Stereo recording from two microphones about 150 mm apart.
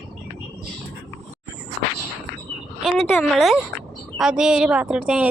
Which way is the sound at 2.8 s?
Centre (ahead or behind).